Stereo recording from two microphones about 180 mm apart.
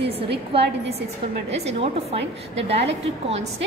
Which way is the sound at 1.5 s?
35° right (ahead or behind).